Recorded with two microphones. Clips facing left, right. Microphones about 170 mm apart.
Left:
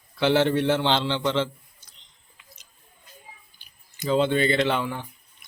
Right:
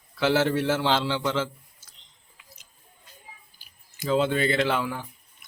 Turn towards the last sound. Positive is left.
turn(degrees=-5)  # may be behind; listen again after turning